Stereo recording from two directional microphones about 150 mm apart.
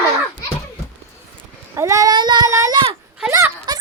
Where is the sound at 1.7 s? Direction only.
20° right (ahead or behind).